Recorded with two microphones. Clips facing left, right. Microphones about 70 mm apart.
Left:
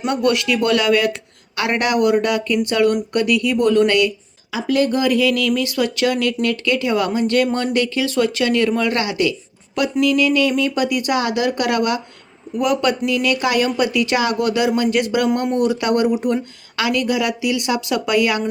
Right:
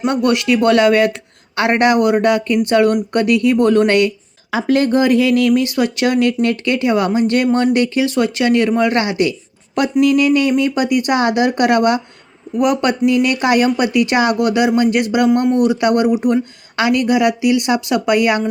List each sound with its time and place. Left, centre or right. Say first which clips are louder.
0.0 s speech: right 3 dB; right
15.4 s speech: right 4 dB; centre
16.7 s speech: right 5 dB; right